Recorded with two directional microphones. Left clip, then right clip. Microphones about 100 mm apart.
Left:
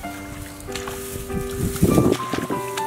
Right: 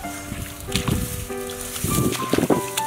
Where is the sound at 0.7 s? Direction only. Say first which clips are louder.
Right 4 dB; 25° right (ahead or behind).